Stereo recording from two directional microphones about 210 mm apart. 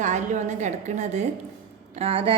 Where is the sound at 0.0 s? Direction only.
35° right (ahead or behind).